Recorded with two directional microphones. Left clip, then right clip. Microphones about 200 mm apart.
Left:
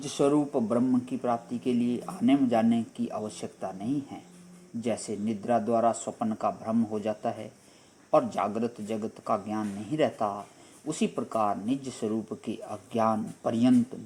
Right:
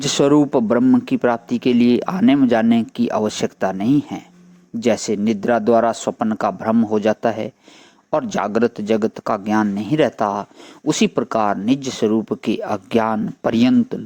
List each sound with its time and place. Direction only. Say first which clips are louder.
0.2 s speech: right 10 dB; 50° right (ahead or behind)